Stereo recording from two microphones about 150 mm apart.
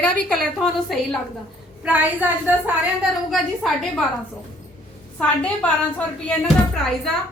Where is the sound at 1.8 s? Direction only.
10° right (ahead or behind).